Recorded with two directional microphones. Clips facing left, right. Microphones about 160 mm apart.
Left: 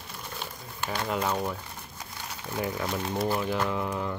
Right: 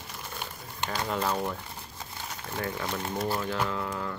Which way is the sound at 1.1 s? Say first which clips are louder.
Left 1 dB; 5° left (ahead or behind).